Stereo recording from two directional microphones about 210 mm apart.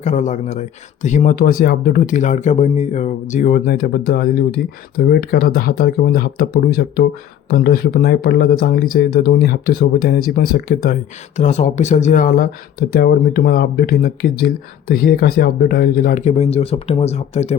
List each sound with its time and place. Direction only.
0.0 s speech: 35° left (ahead or behind)
11.3 s speech: 35° left (ahead or behind)